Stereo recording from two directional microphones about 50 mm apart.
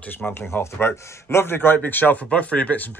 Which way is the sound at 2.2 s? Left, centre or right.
Left.